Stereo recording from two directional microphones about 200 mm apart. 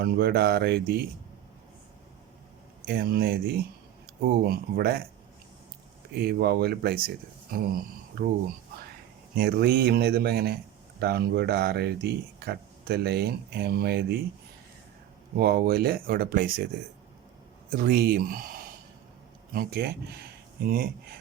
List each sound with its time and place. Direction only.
0.0 s speech: 50° right (ahead or behind)
2.8 s speech: 50° right (ahead or behind)
6.1 s speech: 50° right (ahead or behind)
9.3 s speech: 55° right (ahead or behind)
15.4 s speech: 50° right (ahead or behind)
17.7 s speech: 50° right (ahead or behind)